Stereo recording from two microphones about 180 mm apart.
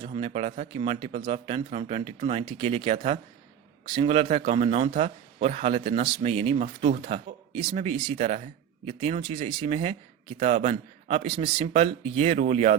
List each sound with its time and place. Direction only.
0.0 s speech: 35° right (ahead or behind)
7.5 s speech: 30° right (ahead or behind)